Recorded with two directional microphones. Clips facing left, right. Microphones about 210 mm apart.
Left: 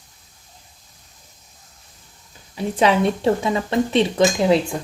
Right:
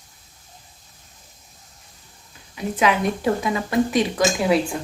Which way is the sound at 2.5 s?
30° left (ahead or behind).